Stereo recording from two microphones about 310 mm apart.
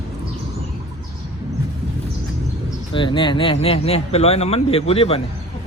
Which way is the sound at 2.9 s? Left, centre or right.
Centre.